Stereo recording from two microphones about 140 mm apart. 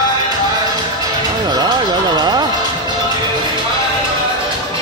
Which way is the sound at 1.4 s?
30° right (ahead or behind).